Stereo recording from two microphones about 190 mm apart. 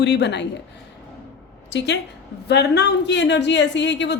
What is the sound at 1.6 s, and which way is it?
A woman's voice, 65° left (ahead or behind).